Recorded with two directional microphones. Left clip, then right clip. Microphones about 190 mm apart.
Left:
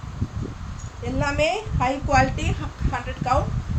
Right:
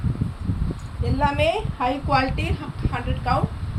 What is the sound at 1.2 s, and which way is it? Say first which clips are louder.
A woman's voice: right 2 dB; 20° left (ahead or behind).